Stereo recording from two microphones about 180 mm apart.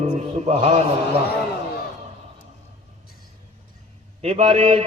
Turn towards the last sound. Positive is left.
turn(degrees=-35)  # may be behind; listen again after turning